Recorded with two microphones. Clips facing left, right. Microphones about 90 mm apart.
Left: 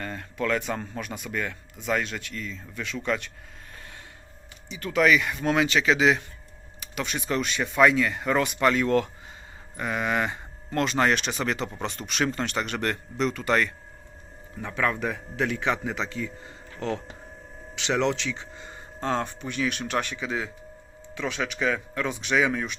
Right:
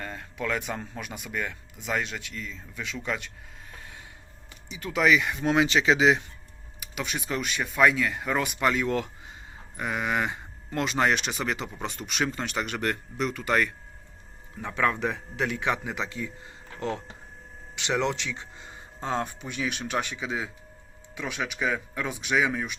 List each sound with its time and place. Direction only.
0.0 s speech: 10° right (ahead or behind)
4.7 s speech: 15° right (ahead or behind)
14.6 s speech: 20° right (ahead or behind)
17.7 s speech: 5° right (ahead or behind)